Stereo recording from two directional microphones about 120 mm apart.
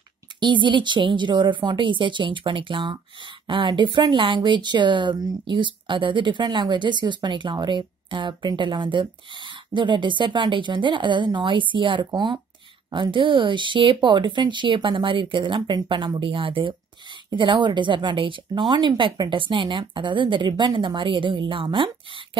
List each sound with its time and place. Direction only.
0.4 s speech: 40° right (ahead or behind)